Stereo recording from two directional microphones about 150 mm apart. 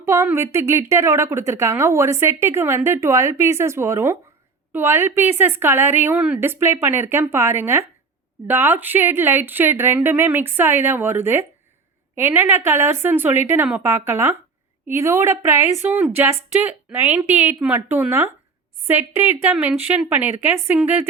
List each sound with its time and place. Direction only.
0.0 s a woman's voice: 15° right (ahead or behind)